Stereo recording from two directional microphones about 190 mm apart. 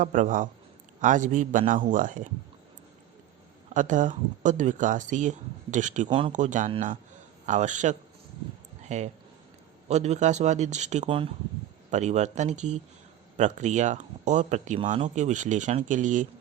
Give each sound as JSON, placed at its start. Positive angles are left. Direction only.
{"t": 0.0, "sound": "a man's voice", "side_deg": -40}
{"t": 3.8, "sound": "speech", "side_deg": -40}
{"t": 6.1, "sound": "speech", "side_deg": -25}
{"t": 6.3, "sound": "speech", "side_deg": -40}